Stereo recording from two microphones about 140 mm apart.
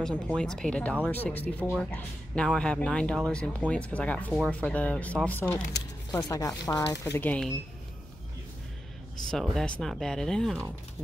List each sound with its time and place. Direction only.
0.4 s speech: 5° left (ahead or behind)
6.1 s speech: 25° left (ahead or behind)
7.2 s speech: 5° left (ahead or behind)
9.3 s speech: centre (ahead or behind)